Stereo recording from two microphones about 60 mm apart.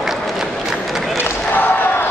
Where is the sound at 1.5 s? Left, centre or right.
Left.